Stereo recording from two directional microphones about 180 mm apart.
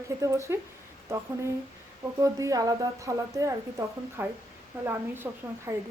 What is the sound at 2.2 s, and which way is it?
A woman's voice, 20° right (ahead or behind).